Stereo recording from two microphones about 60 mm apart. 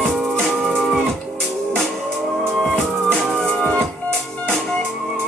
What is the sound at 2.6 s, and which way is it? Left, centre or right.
Music, centre.